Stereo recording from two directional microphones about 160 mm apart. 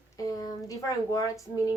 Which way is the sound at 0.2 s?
25° left (ahead or behind).